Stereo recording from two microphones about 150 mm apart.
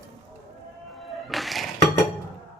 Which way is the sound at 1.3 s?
Centre (ahead or behind).